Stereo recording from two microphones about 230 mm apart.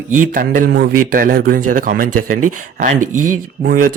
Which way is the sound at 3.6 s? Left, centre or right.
Right.